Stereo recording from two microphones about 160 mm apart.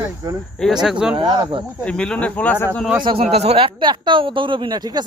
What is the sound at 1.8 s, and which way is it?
Speech, 5° left (ahead or behind).